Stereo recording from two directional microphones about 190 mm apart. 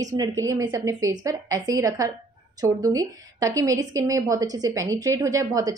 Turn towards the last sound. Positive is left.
turn(degrees=-15)  # may be behind; listen again after turning